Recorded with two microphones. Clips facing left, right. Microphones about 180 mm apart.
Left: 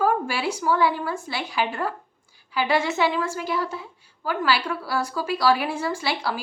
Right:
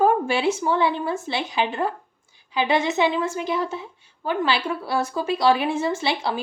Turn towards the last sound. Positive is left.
turn(degrees=-20)  # may be behind; listen again after turning